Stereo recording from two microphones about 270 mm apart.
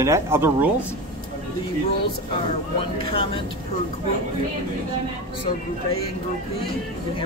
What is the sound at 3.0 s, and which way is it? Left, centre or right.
Speech, centre.